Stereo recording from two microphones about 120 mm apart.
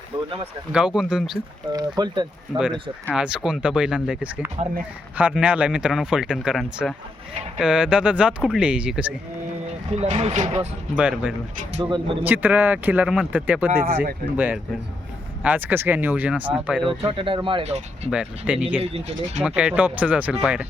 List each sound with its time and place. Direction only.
0.7 s speech: 5° right (ahead or behind)
1.7 s speech: 35° right (ahead or behind)
2.5 s speech: centre (ahead or behind)
10.0 s speech: 65° right (ahead or behind)
10.9 s speech: 10° right (ahead or behind)
11.8 s speech: 40° right (ahead or behind)
12.2 s speech: 15° right (ahead or behind)
17.0 s speech: 50° right (ahead or behind)
17.7 s speech: 65° right (ahead or behind)
18.1 s speech: 10° right (ahead or behind)
18.8 s speech: 55° right (ahead or behind)
19.5 s speech: 10° right (ahead or behind)